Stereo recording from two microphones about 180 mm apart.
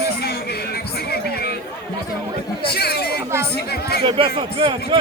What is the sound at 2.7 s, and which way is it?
Speech, 60° left (ahead or behind).